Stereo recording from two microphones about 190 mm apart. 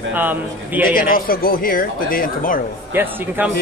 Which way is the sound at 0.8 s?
50° left (ahead or behind).